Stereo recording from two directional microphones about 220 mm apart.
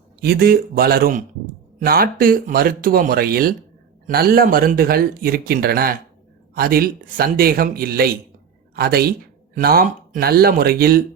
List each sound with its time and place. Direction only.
0.2 s speech: 45° right (ahead or behind)